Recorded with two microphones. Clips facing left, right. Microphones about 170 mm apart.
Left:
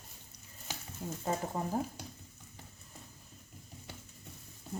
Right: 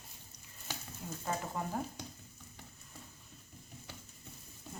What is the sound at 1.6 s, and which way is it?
Speech, 30° left (ahead or behind).